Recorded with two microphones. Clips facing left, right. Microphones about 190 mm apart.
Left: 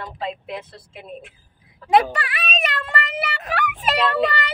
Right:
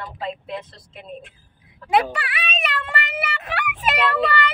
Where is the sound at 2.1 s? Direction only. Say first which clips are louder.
Left 2 dB; 40° left (ahead or behind).